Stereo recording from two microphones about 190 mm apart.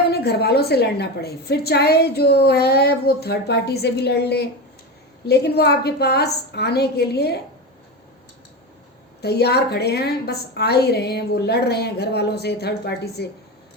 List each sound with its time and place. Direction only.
0.1 s a woman's voice: 60° left (ahead or behind)
9.2 s a woman's voice: 60° left (ahead or behind)